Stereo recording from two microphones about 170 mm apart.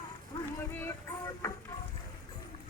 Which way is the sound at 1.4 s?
15° left (ahead or behind).